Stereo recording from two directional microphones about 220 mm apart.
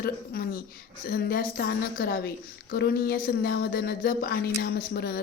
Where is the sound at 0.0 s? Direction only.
45° left (ahead or behind).